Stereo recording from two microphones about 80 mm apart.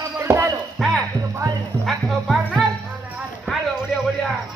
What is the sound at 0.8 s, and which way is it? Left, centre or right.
Speech, centre.